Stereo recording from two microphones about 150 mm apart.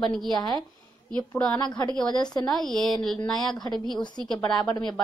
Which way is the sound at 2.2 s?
30° left (ahead or behind).